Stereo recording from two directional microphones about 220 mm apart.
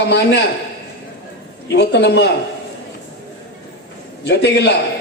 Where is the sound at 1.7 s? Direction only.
50° left (ahead or behind).